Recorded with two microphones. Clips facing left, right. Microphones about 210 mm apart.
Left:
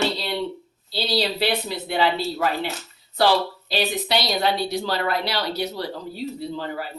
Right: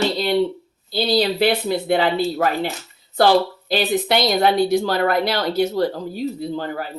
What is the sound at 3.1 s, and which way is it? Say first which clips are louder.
Speech: right 4 dB; 50° right (ahead or behind).